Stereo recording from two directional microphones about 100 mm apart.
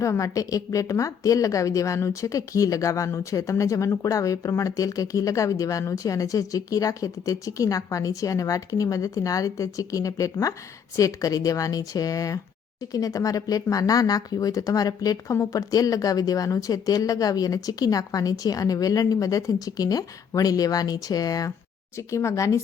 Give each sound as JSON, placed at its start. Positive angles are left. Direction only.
{"t": 0.0, "sound": "speech", "side_deg": 35}